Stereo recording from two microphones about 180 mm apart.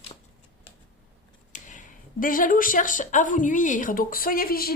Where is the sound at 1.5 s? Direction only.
45° left (ahead or behind).